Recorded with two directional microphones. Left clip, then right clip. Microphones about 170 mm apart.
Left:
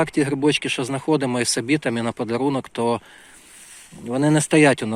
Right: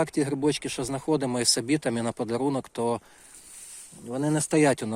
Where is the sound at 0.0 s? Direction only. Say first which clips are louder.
Left 6 dB; 10° right (ahead or behind).